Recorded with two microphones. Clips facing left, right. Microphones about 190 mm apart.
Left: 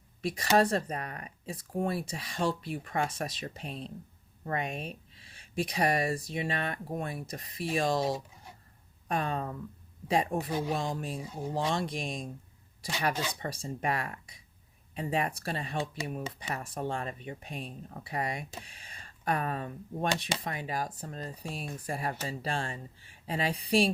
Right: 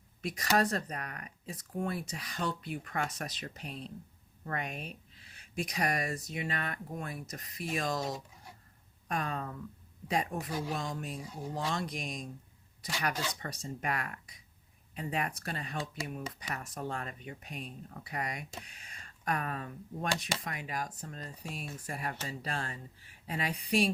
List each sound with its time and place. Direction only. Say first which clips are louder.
0.2 s speech: left 4 dB; 30° left (ahead or behind)